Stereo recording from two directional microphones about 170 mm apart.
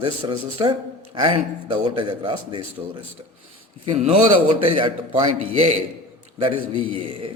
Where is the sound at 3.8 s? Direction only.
40° right (ahead or behind).